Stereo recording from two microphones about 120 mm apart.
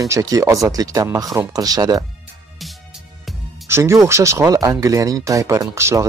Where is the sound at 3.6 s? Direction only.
20° right (ahead or behind).